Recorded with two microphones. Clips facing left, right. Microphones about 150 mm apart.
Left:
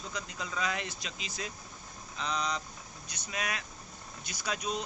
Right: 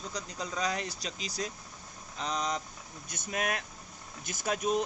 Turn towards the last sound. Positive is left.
turn(degrees=-50)  # may be behind; listen again after turning